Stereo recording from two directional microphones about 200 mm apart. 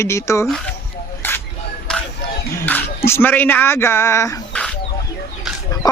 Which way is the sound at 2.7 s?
10° left (ahead or behind).